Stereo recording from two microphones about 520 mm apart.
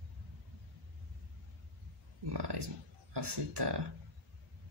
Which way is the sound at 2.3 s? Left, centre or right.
Right.